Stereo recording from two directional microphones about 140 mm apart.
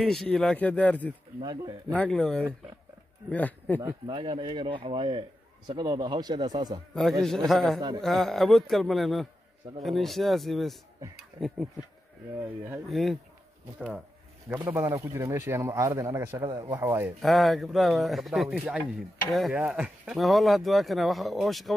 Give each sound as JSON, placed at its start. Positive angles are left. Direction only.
{"t": 0.0, "sound": "speech", "side_deg": 5}
{"t": 1.4, "sound": "speech", "side_deg": -25}
{"t": 1.9, "sound": "speech", "side_deg": 10}
{"t": 3.8, "sound": "speech", "side_deg": -35}
{"t": 6.9, "sound": "speech", "side_deg": 0}
{"t": 12.8, "sound": "speech", "side_deg": 0}
{"t": 13.7, "sound": "speech", "side_deg": -10}
{"t": 16.4, "sound": "speech", "side_deg": -30}
{"t": 16.8, "sound": "speech", "side_deg": -15}
{"t": 17.2, "sound": "speech", "side_deg": 0}